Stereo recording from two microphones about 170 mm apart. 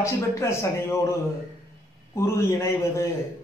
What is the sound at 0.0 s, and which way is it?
Speech, 15° left (ahead or behind).